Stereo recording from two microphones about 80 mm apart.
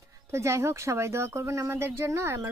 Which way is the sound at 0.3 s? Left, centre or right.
Right.